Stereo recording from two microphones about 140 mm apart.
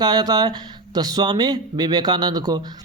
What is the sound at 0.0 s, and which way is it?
Speech, 30° right (ahead or behind).